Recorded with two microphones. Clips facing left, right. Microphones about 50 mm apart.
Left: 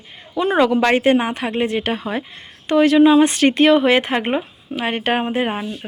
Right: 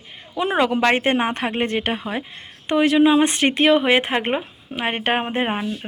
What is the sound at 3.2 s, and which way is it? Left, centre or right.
Speech, right.